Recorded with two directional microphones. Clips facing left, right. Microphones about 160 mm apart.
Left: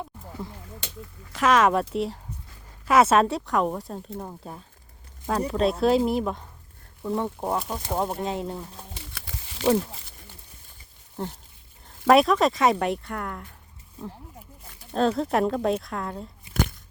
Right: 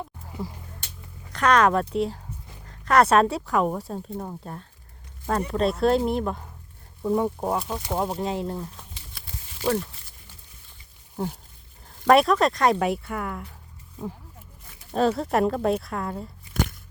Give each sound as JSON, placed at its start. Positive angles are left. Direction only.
{"t": 1.3, "sound": "speech", "side_deg": 5}
{"t": 7.0, "sound": "speech", "side_deg": -10}
{"t": 9.1, "sound": "a sound", "side_deg": 80}
{"t": 11.2, "sound": "speech", "side_deg": -10}
{"t": 14.8, "sound": "speech", "side_deg": -5}